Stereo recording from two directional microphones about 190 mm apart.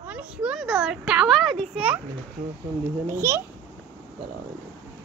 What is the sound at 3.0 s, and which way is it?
Speech, 15° right (ahead or behind).